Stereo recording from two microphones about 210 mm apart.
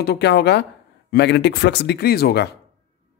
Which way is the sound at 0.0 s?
50° left (ahead or behind).